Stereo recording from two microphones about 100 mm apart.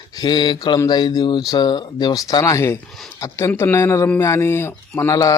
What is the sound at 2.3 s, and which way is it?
Speech, 35° left (ahead or behind).